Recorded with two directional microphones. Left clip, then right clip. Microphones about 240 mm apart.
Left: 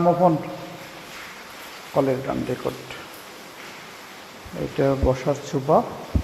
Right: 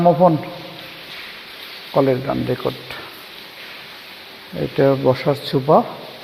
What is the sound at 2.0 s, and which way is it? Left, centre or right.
Speech, right.